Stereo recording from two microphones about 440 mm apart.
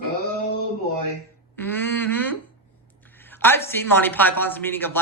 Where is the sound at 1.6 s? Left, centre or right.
Centre.